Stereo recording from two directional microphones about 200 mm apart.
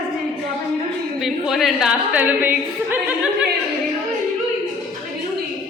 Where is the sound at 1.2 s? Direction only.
Centre (ahead or behind).